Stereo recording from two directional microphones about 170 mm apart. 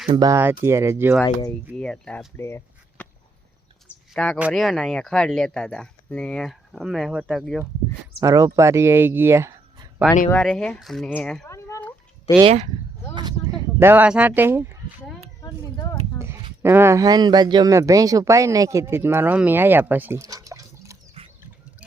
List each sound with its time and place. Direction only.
0.1 s speech: 20° right (ahead or behind)
1.2 s speech: 20° left (ahead or behind)
1.7 s speech: 5° left (ahead or behind)
4.1 s speech: 5° left (ahead or behind)
8.2 s speech: 20° right (ahead or behind)
10.4 s speech: 5° left (ahead or behind)
11.4 s cat: 15° left (ahead or behind)
12.4 s speech: 35° right (ahead or behind)
13.7 s speech: 10° right (ahead or behind)
15.4 s a sound: 20° left (ahead or behind)
16.1 s a sound: 15° right (ahead or behind)
16.6 s speech: 15° right (ahead or behind)